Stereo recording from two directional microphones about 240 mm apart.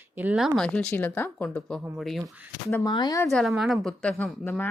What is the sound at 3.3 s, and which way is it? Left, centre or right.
Speech, centre.